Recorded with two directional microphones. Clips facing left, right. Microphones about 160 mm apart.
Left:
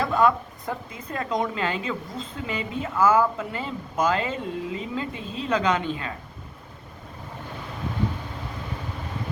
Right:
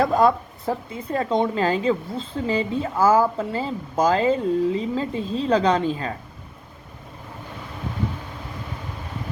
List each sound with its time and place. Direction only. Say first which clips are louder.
0.0 s speech: right 3 dB; 35° right (ahead or behind)